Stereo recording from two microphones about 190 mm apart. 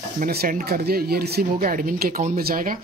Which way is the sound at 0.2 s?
50° right (ahead or behind).